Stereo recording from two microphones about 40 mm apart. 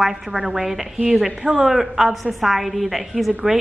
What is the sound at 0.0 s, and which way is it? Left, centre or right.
A woman's voice, centre.